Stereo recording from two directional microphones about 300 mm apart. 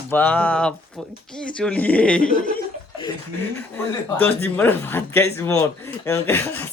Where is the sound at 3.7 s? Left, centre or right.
Centre.